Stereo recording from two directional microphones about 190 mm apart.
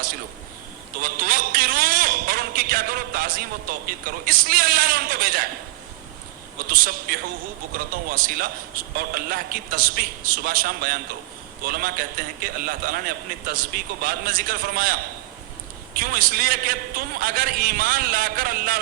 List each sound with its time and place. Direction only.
1.0 s a man's voice: 50° right (ahead or behind)
6.7 s a man's voice: 50° right (ahead or behind)